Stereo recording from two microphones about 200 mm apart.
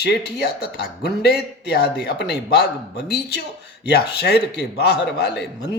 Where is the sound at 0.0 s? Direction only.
55° left (ahead or behind).